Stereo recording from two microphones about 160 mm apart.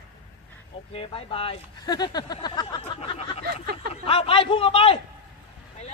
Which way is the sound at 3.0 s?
40° left (ahead or behind).